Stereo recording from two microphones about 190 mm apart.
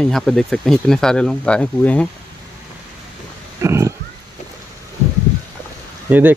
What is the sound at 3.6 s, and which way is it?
Pig, 15° right (ahead or behind).